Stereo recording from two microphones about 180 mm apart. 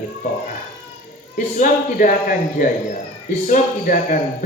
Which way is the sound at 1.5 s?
45° left (ahead or behind).